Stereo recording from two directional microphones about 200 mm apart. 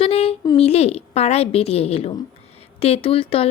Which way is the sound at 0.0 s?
30° left (ahead or behind).